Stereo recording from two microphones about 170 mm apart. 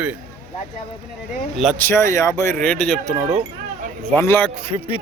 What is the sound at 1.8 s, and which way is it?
Speech, 15° left (ahead or behind).